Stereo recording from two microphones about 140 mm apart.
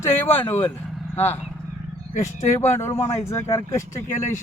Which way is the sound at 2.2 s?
20° left (ahead or behind).